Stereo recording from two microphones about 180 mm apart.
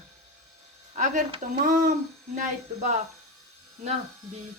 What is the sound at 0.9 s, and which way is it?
Speech, 45° right (ahead or behind).